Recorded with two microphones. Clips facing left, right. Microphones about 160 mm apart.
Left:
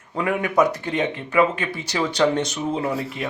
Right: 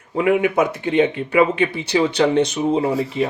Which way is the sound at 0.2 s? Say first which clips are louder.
Right 3 dB; 25° right (ahead or behind).